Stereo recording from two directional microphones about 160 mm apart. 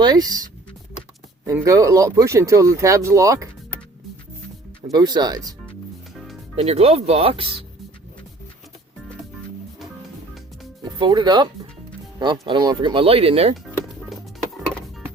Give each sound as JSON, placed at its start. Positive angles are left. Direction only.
{"t": 0.0, "sound": "speech", "side_deg": -25}
{"t": 1.5, "sound": "speech", "side_deg": -20}
{"t": 4.9, "sound": "speech", "side_deg": -25}
{"t": 6.6, "sound": "speech", "side_deg": -40}
{"t": 11.0, "sound": "speech", "side_deg": -25}
{"t": 14.1, "sound": "music", "side_deg": 0}